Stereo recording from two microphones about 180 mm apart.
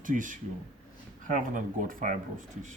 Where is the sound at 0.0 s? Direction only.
45° right (ahead or behind).